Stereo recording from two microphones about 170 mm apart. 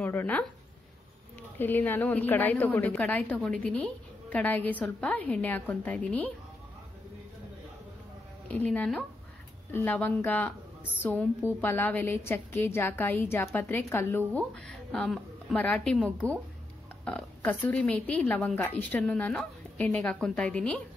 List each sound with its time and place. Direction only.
0.0 s a woman's voice: 10° left (ahead or behind)
1.6 s a woman's voice: 10° left (ahead or behind)
8.5 s a woman's voice: 10° left (ahead or behind)